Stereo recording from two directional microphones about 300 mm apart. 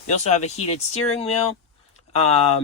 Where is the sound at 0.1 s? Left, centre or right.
Left.